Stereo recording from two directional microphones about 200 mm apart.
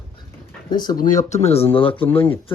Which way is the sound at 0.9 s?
40° left (ahead or behind).